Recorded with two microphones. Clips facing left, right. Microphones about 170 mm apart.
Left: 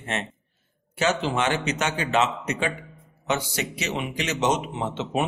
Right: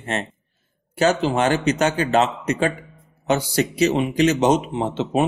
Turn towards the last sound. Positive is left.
turn(degrees=-35)  # may be behind; listen again after turning